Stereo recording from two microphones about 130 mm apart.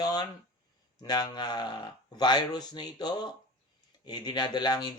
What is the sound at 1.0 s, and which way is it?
Speech, 30° left (ahead or behind).